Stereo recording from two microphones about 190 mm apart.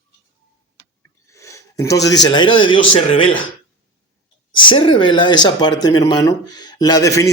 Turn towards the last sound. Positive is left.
turn(degrees=15)  # may be behind; listen again after turning